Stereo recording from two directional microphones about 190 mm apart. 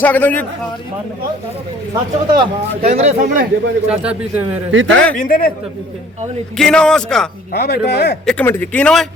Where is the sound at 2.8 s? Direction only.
35° right (ahead or behind).